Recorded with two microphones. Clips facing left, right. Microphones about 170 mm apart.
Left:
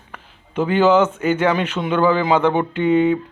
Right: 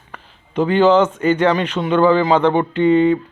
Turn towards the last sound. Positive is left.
turn(degrees=10)  # may be behind; listen again after turning